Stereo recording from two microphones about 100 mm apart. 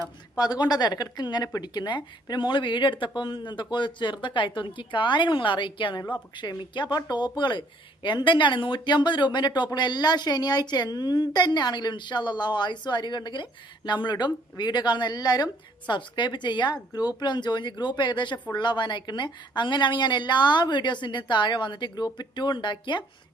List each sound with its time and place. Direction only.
0.3 s speech: 40° left (ahead or behind)